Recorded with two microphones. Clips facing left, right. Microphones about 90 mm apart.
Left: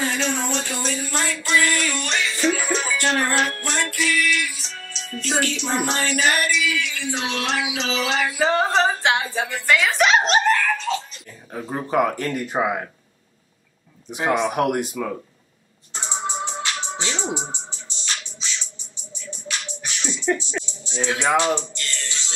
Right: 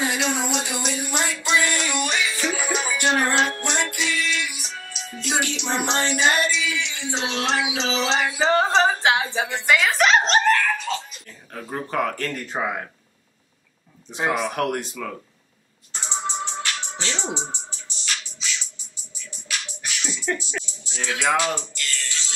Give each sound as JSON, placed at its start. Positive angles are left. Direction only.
{"t": 0.0, "sound": "a sound", "side_deg": -15}
{"t": 8.7, "sound": "speech", "side_deg": 0}
{"t": 10.9, "sound": "dog", "side_deg": 0}
{"t": 11.5, "sound": "speech", "side_deg": 15}
{"t": 14.5, "sound": "speech", "side_deg": 15}
{"t": 16.1, "sound": "music", "side_deg": 15}
{"t": 17.6, "sound": "music", "side_deg": 30}
{"t": 19.9, "sound": "music", "side_deg": 30}